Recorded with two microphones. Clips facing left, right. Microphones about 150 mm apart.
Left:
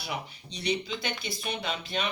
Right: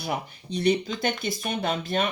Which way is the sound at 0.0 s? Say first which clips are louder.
Right 6 dB; 50° right (ahead or behind).